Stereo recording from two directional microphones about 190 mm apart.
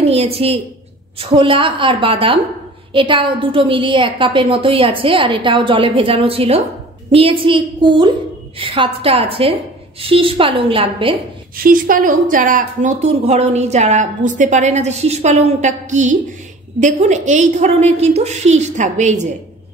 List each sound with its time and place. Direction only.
0.1 s a woman's voice: 30° right (ahead or behind)
11.5 s a woman's voice: 50° right (ahead or behind)